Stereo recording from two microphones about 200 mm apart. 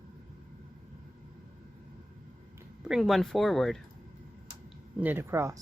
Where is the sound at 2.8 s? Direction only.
Centre (ahead or behind).